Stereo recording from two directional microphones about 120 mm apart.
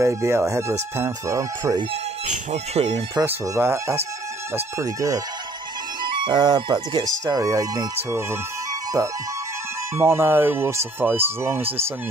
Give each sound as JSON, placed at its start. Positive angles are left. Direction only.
{"t": 0.0, "sound": "speech", "side_deg": -25}
{"t": 2.2, "sound": "speech", "side_deg": -60}
{"t": 3.3, "sound": "speech", "side_deg": -20}
{"t": 6.2, "sound": "speech", "side_deg": -35}
{"t": 9.9, "sound": "speech", "side_deg": -20}